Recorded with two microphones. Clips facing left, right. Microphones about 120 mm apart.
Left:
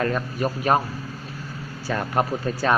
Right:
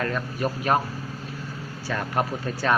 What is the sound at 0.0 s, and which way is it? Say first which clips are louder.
Speech: left 3 dB; 20° left (ahead or behind).